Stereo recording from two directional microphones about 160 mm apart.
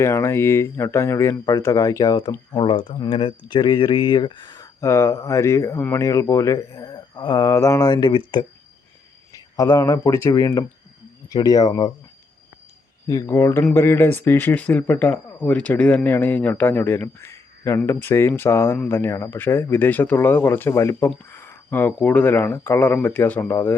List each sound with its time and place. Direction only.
0.0 s speech: 15° left (ahead or behind)
2.6 s speech: 30° left (ahead or behind)
9.3 s speech: 20° left (ahead or behind)
13.1 s speech: 20° left (ahead or behind)